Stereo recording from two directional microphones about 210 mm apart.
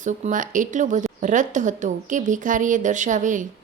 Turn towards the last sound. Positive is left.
turn(degrees=-35)  # may be behind; listen again after turning